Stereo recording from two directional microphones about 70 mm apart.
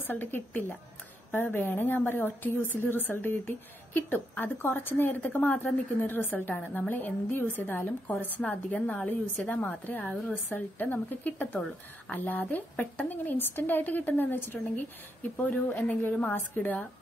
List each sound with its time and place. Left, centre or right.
0.0 s a woman's voice: left
8.4 s a woman's voice: centre